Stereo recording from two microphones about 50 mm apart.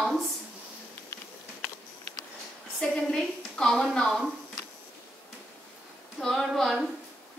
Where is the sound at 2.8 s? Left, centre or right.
Centre.